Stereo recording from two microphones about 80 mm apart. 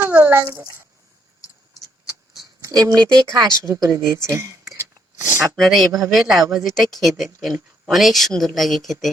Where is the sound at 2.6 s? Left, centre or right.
Right.